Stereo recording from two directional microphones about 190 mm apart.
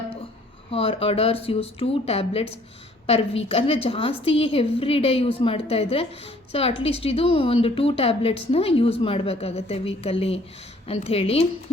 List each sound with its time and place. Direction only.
0.7 s a woman's voice: 30° left (ahead or behind)